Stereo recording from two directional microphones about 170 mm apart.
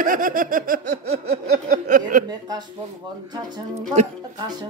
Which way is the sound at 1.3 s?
65° right (ahead or behind).